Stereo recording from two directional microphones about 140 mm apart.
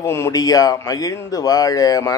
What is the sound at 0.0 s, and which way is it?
Speech, 20° left (ahead or behind).